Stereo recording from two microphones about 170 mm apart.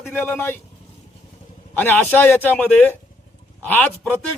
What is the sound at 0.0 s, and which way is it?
Speech, 10° left (ahead or behind).